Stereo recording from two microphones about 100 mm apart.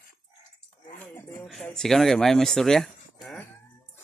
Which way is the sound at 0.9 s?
20° left (ahead or behind).